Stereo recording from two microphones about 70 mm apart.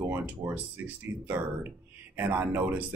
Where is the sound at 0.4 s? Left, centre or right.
Right.